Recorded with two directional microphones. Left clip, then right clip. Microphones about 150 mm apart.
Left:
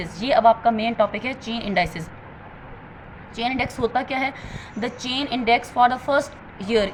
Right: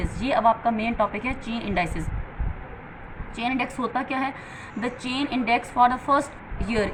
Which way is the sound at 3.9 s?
40° left (ahead or behind).